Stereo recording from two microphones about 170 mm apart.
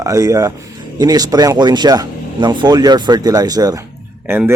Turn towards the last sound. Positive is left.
turn(degrees=-15)  # may be behind; listen again after turning